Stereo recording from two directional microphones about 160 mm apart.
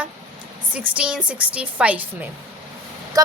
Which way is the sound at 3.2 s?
25° right (ahead or behind).